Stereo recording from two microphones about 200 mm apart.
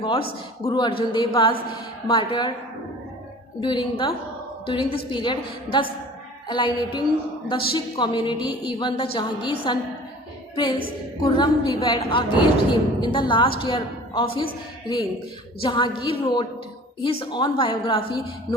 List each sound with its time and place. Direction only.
0.0 s a woman's voice: 25° left (ahead or behind)
3.6 s a woman's voice: 25° left (ahead or behind)